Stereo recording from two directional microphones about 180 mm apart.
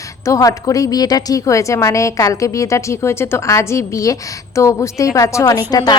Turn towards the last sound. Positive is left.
turn(degrees=20)  # may be behind; listen again after turning